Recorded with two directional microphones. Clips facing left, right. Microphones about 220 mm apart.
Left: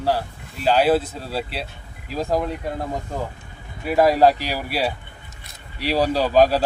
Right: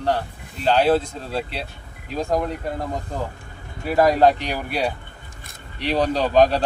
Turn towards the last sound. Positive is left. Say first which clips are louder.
# even
turn(degrees=5)  # may be behind; listen again after turning